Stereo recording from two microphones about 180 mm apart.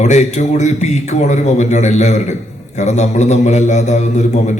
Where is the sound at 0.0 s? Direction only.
40° left (ahead or behind).